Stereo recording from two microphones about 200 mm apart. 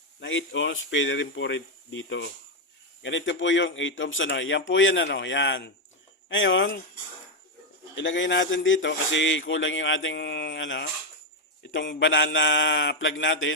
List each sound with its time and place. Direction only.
0.2 s speech: 70° left (ahead or behind)
7.9 s speech: 65° left (ahead or behind)